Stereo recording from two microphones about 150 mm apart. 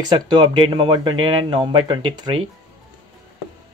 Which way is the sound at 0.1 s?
30° right (ahead or behind).